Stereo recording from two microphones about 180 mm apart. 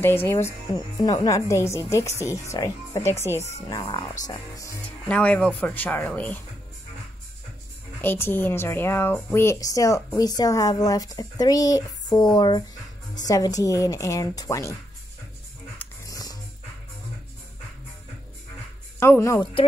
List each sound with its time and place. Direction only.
0.0 s a woman's voice: 10° left (ahead or behind)
4.8 s a woman's voice: 5° left (ahead or behind)
8.0 s a woman's voice: 10° left (ahead or behind)
15.8 s music: 20° left (ahead or behind)
18.9 s speech: 15° left (ahead or behind)